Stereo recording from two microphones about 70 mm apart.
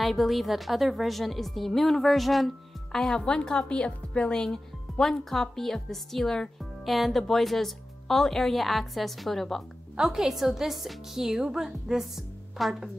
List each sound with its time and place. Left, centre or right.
0.0 s a woman's voice: centre